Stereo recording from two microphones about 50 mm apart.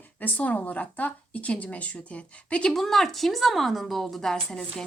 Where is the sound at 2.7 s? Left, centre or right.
Centre.